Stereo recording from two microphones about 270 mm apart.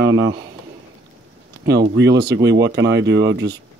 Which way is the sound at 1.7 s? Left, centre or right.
Right.